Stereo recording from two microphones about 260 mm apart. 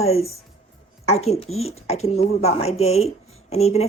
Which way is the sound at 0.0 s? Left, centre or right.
Left.